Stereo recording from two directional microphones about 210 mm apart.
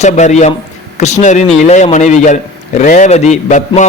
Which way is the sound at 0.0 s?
35° left (ahead or behind).